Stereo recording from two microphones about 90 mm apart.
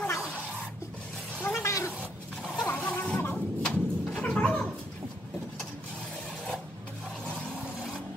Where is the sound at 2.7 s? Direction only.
15° left (ahead or behind).